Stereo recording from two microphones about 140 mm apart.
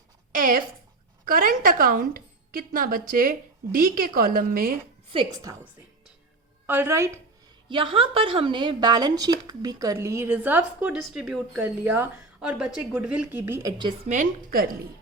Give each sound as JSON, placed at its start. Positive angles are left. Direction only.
{"t": 0.3, "sound": "a woman's voice", "side_deg": -90}
{"t": 5.3, "sound": "speech", "side_deg": -25}
{"t": 6.7, "sound": "speech", "side_deg": -15}
{"t": 7.7, "sound": "speech", "side_deg": -35}
{"t": 13.6, "sound": "speech", "side_deg": -30}
{"t": 14.1, "sound": "a woman's voice", "side_deg": -80}